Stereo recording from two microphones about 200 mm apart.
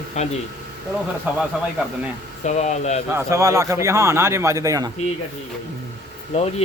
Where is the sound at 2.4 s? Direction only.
35° left (ahead or behind).